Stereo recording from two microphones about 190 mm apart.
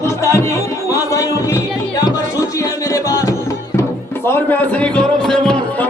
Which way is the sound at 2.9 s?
20° left (ahead or behind).